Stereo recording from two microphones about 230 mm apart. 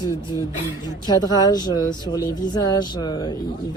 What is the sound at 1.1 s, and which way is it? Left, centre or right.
Speech, centre.